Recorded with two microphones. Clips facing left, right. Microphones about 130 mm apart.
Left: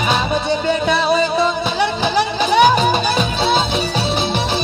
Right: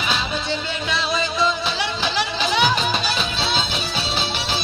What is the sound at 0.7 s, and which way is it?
Music, 50° left (ahead or behind).